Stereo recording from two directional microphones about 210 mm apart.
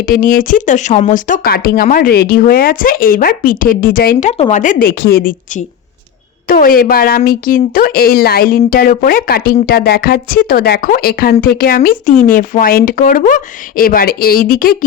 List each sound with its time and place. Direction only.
0.0 s speech: 45° left (ahead or behind)